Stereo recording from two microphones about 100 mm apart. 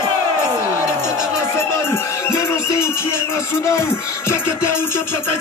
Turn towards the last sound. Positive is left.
turn(degrees=25)  # may be behind; listen again after turning